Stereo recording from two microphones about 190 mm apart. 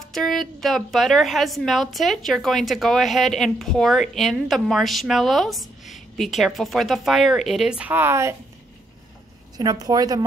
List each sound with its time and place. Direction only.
0.0 s a woman's voice: centre (ahead or behind); by 8.4 s 15° right (ahead or behind)
9.6 s a woman's voice: 20° right (ahead or behind)